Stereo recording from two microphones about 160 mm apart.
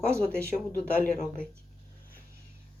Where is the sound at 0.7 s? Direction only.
55° left (ahead or behind).